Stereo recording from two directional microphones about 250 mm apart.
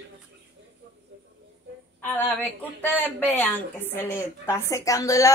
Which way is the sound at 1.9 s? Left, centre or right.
Centre.